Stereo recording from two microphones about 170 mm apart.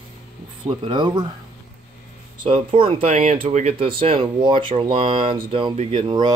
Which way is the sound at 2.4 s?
30° right (ahead or behind).